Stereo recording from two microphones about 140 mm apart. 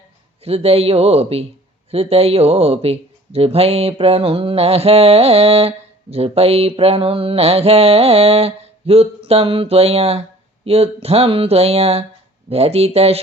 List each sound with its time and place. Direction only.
0.4 s speech: 45° right (ahead or behind)